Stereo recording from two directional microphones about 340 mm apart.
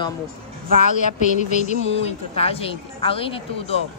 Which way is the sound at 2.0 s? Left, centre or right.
Centre.